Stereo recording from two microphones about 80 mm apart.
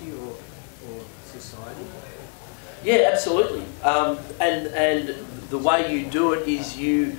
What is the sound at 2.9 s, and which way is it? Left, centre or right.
A man's voice, centre.